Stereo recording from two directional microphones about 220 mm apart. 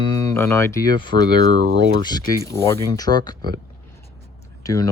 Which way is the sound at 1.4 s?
45° right (ahead or behind).